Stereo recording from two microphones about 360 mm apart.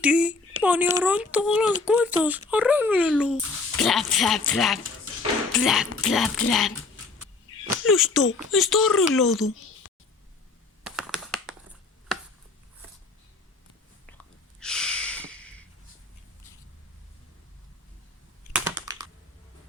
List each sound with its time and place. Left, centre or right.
0.0 s a sound: centre
1.0 s speech: centre
9.8 s a sound: left
10.8 s computer keyboard: centre
14.6 s snort: centre
18.5 s computer keyboard: centre